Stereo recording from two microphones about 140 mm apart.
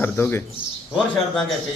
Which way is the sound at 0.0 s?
15° left (ahead or behind).